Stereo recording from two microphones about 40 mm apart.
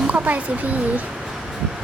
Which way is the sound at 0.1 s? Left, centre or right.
Right.